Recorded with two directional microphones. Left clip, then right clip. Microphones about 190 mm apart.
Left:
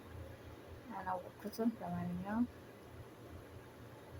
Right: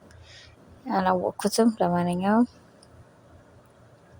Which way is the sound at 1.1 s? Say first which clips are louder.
Right 16 dB; 55° right (ahead or behind).